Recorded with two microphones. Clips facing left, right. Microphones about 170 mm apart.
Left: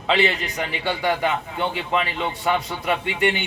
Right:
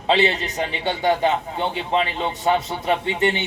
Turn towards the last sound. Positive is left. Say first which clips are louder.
# right 2 dB
turn(degrees=-30)  # may be behind; listen again after turning